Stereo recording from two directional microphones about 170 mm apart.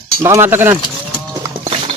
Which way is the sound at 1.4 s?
15° right (ahead or behind).